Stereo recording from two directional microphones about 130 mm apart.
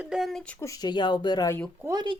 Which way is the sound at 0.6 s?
25° left (ahead or behind).